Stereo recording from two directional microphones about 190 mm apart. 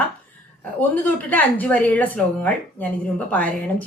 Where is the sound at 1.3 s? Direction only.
10° left (ahead or behind).